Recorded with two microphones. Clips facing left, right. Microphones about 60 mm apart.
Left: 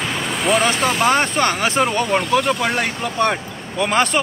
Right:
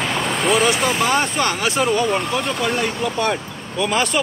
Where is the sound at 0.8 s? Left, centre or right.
Left.